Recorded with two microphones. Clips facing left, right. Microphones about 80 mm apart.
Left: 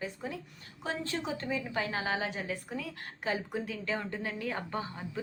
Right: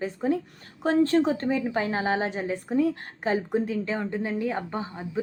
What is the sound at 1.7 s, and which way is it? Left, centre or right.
Speech, right.